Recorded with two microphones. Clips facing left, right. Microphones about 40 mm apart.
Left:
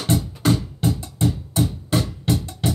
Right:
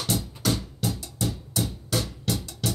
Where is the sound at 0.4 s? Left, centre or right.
Left.